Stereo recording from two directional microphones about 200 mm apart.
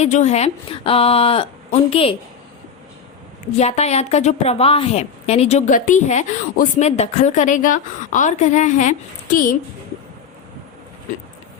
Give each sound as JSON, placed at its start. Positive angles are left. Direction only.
{"t": 0.0, "sound": "a woman's voice", "side_deg": 35}
{"t": 3.6, "sound": "a woman's voice", "side_deg": 35}